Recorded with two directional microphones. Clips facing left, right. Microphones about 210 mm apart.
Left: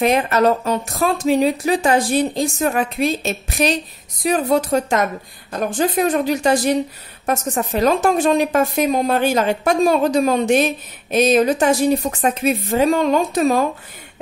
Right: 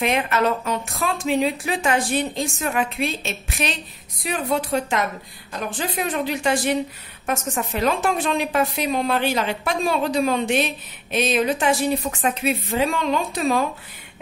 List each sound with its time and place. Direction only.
0.0 s a woman's voice: 40° left (ahead or behind)